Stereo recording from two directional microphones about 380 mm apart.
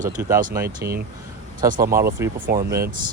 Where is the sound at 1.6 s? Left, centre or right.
Right.